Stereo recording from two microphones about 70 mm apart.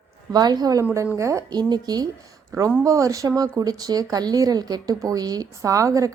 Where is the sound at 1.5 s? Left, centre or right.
Right.